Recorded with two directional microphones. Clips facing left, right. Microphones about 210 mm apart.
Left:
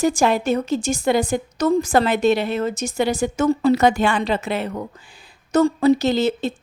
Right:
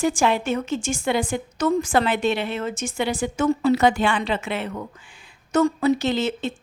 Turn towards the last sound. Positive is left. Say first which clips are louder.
# left 4 dB
turn(degrees=40)  # may be behind; listen again after turning